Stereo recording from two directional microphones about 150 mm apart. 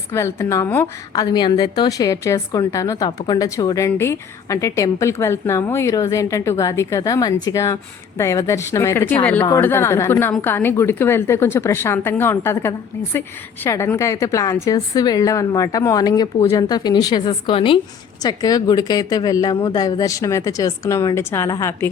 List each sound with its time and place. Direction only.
0.1 s a woman's voice: 15° left (ahead or behind)
1.1 s a woman's voice: 25° left (ahead or behind)
18.2 s a woman's voice: 25° left (ahead or behind)